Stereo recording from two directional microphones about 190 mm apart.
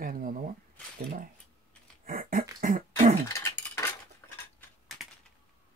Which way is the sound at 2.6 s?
40° right (ahead or behind).